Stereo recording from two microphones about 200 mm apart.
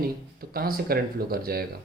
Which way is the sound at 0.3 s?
50° right (ahead or behind).